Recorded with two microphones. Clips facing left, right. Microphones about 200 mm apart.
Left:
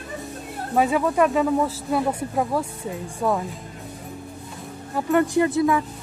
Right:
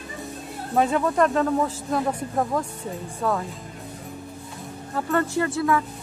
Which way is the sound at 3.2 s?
15° left (ahead or behind).